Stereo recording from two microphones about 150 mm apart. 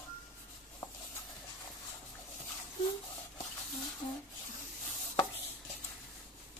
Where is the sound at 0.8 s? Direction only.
30° left (ahead or behind).